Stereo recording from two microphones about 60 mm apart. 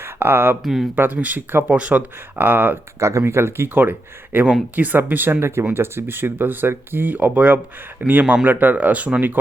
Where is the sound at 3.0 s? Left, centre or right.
Right.